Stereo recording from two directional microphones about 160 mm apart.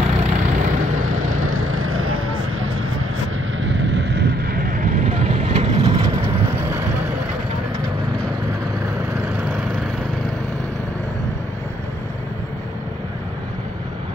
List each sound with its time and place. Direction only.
0.1 s vehicle: 45° right (ahead or behind)
3.8 s vehicle: 90° right; by 4.8 s 65° right (ahead or behind)
4.9 s vehicle: 45° right (ahead or behind)
5.9 s vehicle: 20° right (ahead or behind)